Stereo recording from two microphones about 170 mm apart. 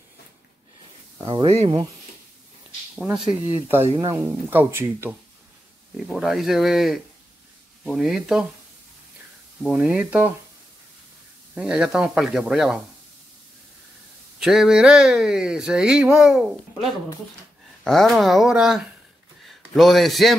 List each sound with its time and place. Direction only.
1.2 s speech: 30° right (ahead or behind)
3.6 s speech: 15° right (ahead or behind)
5.9 s speech: centre (ahead or behind)
9.6 s speech: 5° right (ahead or behind)
11.5 s speech: 5° right (ahead or behind)
14.4 s speech: 5° right (ahead or behind)
17.8 s a man's voice: centre (ahead or behind)